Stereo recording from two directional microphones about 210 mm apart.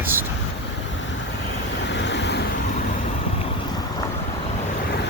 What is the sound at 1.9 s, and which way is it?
Vehicle, 60° left (ahead or behind).